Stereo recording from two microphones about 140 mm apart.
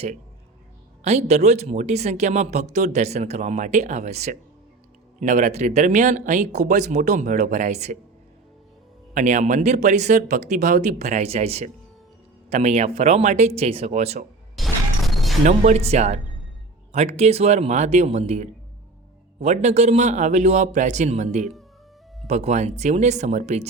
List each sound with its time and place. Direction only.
1.0 s speech: 50° right (ahead or behind)
9.1 s speech: 60° right (ahead or behind)
14.5 s a sound: centre (ahead or behind)
15.4 s speech: 55° right (ahead or behind)